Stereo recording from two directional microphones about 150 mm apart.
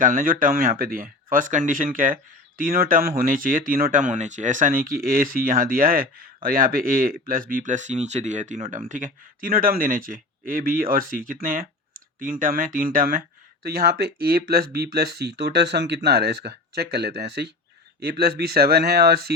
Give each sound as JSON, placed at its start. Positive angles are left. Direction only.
{"t": 0.0, "sound": "speech", "side_deg": -65}
{"t": 13.7, "sound": "speech", "side_deg": -90}